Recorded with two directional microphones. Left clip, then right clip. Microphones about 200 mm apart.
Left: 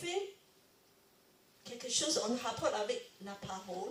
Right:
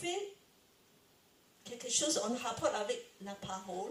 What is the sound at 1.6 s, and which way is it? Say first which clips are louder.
A woman's voice: right 1 dB; 35° right (ahead or behind).